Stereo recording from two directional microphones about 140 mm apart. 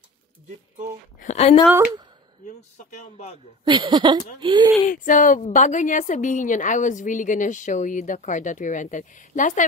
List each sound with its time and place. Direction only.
1.2 s a woman's voice: 50° left (ahead or behind)
3.6 s speech: 35° right (ahead or behind)
4.8 s speech: 65° left (ahead or behind)
5.4 s a woman's voice: 60° left (ahead or behind)